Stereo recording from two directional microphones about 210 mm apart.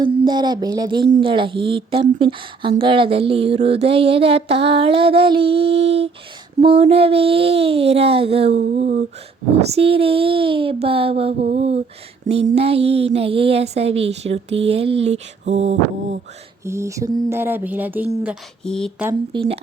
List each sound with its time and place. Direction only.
0.0 s speech: 20° right (ahead or behind)
8.6 s a sound: 40° right (ahead or behind)
9.6 s speech: 30° right (ahead or behind)
16.6 s speech: 15° right (ahead or behind)
18.6 s speech: 5° left (ahead or behind)